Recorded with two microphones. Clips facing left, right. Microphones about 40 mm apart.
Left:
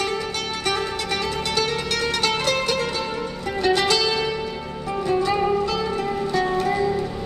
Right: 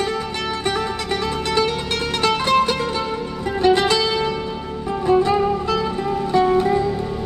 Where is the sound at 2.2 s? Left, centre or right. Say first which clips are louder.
Right 6 dB; right.